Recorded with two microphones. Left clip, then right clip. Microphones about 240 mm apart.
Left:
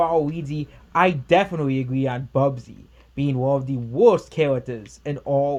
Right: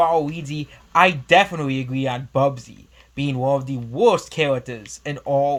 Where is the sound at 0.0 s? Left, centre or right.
Centre.